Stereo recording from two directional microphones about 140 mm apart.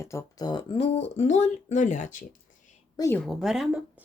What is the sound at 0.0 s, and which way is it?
Speech, 20° left (ahead or behind).